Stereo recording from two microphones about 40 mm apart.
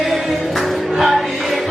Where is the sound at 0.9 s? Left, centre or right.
Centre.